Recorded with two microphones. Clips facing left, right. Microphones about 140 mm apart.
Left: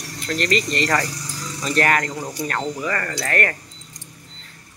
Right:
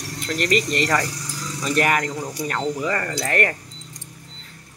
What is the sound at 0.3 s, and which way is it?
Speech, 10° right (ahead or behind).